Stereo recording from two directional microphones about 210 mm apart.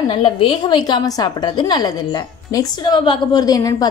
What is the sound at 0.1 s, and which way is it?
A woman's voice, 25° left (ahead or behind).